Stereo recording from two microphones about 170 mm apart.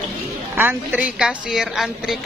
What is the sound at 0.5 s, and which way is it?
A woman's voice, 10° right (ahead or behind).